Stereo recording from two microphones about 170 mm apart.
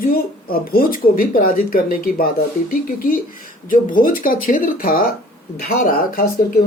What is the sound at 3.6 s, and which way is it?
Speech, 55° left (ahead or behind).